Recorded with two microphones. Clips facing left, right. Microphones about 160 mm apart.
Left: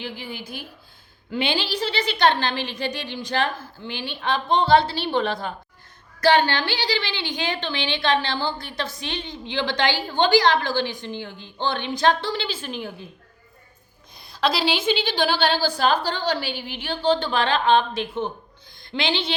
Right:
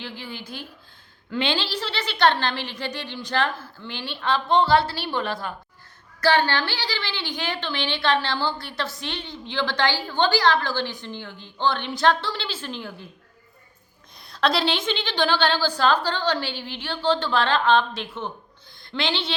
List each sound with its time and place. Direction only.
0.0 s a woman's voice: 15° left (ahead or behind)
14.2 s a woman's voice: centre (ahead or behind)